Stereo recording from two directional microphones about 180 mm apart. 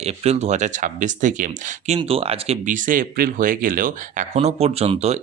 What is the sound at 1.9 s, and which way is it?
Speech, 30° right (ahead or behind).